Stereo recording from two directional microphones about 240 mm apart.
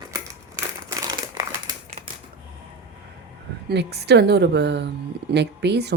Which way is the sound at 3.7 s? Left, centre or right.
Right.